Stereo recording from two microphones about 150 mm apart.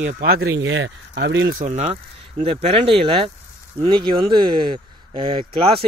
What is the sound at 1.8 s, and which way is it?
Speech, 45° right (ahead or behind).